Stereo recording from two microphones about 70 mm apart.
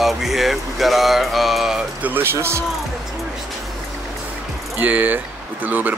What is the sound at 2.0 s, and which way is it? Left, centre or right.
Speech, right.